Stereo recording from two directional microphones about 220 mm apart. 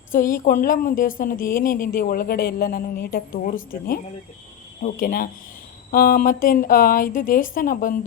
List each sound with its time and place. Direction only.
0.1 s speech: 40° left (ahead or behind)